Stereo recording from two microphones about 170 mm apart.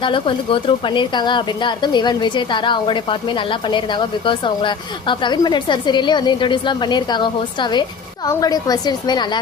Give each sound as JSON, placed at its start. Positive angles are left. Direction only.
{"t": 0.0, "sound": "a woman's voice", "side_deg": 30}